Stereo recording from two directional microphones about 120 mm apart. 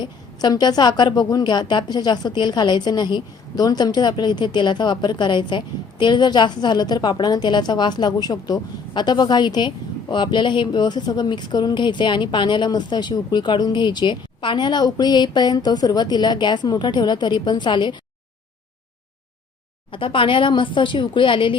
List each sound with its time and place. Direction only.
0.0 s a woman's voice: 35° left (ahead or behind)
19.9 s speech: 45° left (ahead or behind)